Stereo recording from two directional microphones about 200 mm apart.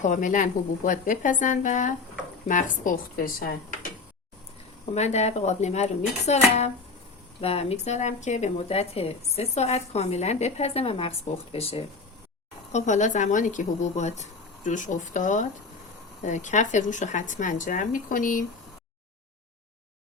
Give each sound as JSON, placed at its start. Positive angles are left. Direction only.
{"t": 0.0, "sound": "a woman's voice", "side_deg": 40}
{"t": 4.9, "sound": "speech", "side_deg": 35}